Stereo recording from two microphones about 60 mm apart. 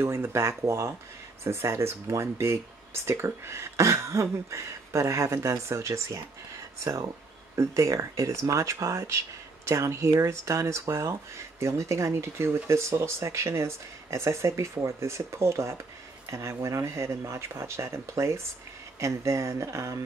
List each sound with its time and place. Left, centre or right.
0.0 s speech: right